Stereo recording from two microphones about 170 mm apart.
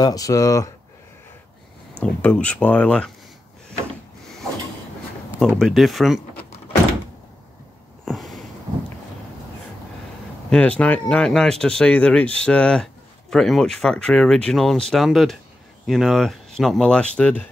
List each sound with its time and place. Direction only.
0.0 s speech: 20° left (ahead or behind)
2.0 s speech: 5° left (ahead or behind)
5.6 s speech: centre (ahead or behind)
8.0 s a sound: centre (ahead or behind)
10.5 s speech: 10° left (ahead or behind)